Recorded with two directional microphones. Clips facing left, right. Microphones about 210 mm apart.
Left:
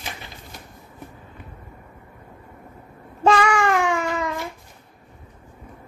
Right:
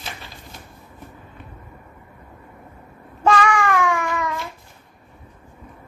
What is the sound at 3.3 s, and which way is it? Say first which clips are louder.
Babbling: even; 25° left (ahead or behind).